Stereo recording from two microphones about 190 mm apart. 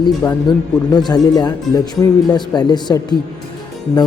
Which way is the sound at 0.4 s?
20° left (ahead or behind).